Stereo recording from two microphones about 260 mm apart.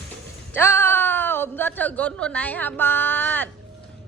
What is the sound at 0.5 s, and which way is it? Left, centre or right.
A woman's voice, centre.